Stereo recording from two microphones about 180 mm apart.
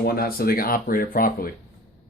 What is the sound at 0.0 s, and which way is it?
Speech, 55° left (ahead or behind).